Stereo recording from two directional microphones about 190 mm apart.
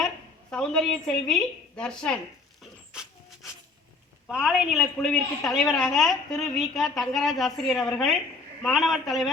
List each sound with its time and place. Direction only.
0.5 s a woman's voice: 5° left (ahead or behind)
2.6 s dog: 5° right (ahead or behind)
4.3 s a woman's voice: 5° right (ahead or behind)